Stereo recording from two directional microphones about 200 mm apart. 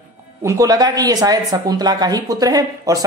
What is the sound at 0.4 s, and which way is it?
Speech, 15° right (ahead or behind).